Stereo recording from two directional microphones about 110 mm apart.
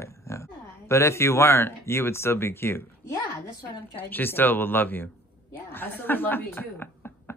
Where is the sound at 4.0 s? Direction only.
15° left (ahead or behind).